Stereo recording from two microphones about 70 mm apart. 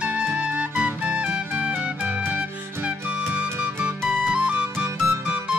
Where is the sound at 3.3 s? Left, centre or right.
Right.